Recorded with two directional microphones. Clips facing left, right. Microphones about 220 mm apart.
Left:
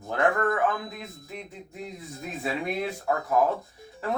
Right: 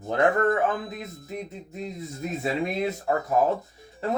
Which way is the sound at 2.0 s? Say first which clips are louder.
Right 5 dB; 20° right (ahead or behind).